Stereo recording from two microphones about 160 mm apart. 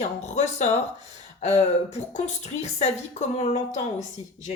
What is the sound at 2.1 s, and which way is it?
A woman's voice, 45° left (ahead or behind).